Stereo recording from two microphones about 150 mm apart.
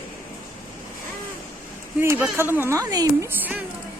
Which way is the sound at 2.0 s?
15° right (ahead or behind).